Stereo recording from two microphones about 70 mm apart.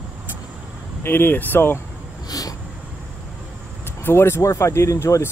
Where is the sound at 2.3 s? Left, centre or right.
Left.